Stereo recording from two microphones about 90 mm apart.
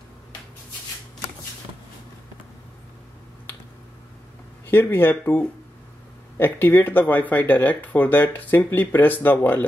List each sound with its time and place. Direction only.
4.6 s speech: 25° left (ahead or behind)